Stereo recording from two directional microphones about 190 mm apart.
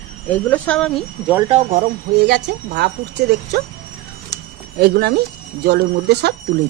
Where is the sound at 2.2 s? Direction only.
60° right (ahead or behind).